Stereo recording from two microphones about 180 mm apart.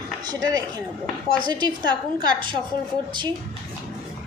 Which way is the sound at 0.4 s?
20° right (ahead or behind).